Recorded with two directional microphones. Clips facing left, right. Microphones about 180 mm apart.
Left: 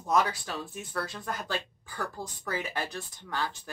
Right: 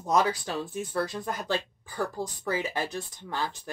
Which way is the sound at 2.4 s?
25° right (ahead or behind).